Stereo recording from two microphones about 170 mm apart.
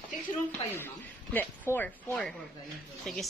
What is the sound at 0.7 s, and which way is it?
A woman's voice, 10° left (ahead or behind).